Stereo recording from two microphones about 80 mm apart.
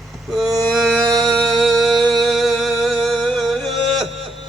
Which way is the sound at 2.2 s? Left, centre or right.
Centre.